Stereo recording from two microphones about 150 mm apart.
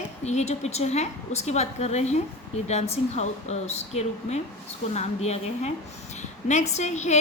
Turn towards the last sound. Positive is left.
turn(degrees=50)  # may be behind; listen again after turning